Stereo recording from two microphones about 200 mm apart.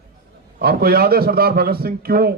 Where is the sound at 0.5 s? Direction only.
50° right (ahead or behind).